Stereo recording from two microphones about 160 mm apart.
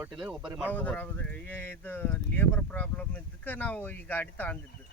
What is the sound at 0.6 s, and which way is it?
Speech, 10° left (ahead or behind).